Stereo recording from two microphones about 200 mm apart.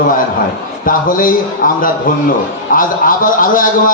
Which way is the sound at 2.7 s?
45° left (ahead or behind).